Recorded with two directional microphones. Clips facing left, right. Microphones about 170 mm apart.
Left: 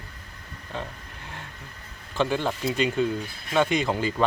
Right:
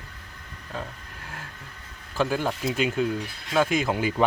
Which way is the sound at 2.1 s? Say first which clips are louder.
Even; 5° right (ahead or behind).